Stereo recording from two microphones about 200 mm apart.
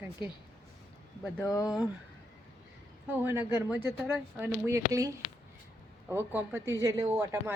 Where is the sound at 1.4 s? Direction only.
15° left (ahead or behind).